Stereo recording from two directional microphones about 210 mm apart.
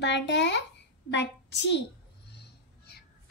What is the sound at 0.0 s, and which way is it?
A child's voice, 55° left (ahead or behind).